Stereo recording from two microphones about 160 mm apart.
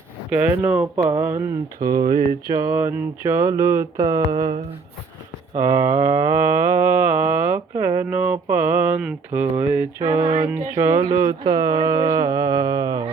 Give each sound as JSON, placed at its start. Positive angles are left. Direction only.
{"t": 0.3, "sound": "mantra", "side_deg": -10}
{"t": 5.5, "sound": "mantra", "side_deg": -15}
{"t": 10.2, "sound": "music", "side_deg": -40}
{"t": 10.7, "sound": "mantra", "side_deg": -15}